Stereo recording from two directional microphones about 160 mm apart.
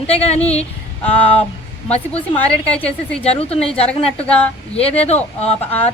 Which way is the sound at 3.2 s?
40° left (ahead or behind).